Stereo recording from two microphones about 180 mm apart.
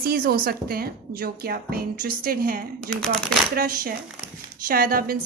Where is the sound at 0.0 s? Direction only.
55° right (ahead or behind).